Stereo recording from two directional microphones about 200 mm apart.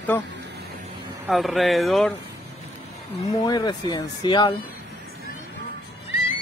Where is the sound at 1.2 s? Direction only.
Centre (ahead or behind).